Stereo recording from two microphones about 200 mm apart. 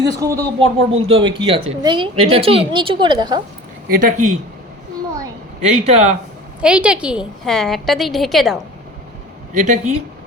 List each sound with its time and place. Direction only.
0.0 s speech: 15° right (ahead or behind)
0.6 s a woman's voice: 30° right (ahead or behind)
3.8 s a man's voice: 45° right (ahead or behind)
5.5 s a man's voice: 35° right (ahead or behind)
6.6 s a woman's voice: 5° right (ahead or behind)
9.6 s a man's voice: 40° right (ahead or behind)